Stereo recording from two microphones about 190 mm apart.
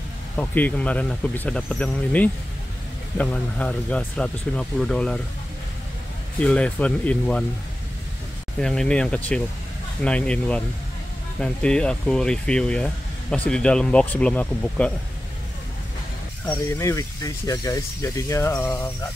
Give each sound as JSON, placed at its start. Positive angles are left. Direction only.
{"t": 0.4, "sound": "speech", "side_deg": 10}
{"t": 6.4, "sound": "speech", "side_deg": 5}
{"t": 8.5, "sound": "speech", "side_deg": 5}
{"t": 16.4, "sound": "speech", "side_deg": 15}